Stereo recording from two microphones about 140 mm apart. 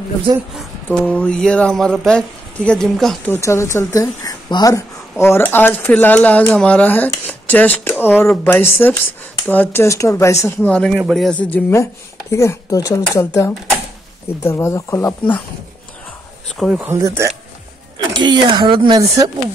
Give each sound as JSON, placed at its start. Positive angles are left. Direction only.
{"t": 0.8, "sound": "speech", "side_deg": 10}
{"t": 3.3, "sound": "speech", "side_deg": 20}
{"t": 5.2, "sound": "speech", "side_deg": 15}
{"t": 10.7, "sound": "speech", "side_deg": 5}
{"t": 11.0, "sound": "speech", "side_deg": -5}
{"t": 11.2, "sound": "speech", "side_deg": 10}
{"t": 16.5, "sound": "speech", "side_deg": -5}
{"t": 17.9, "sound": "speech", "side_deg": -35}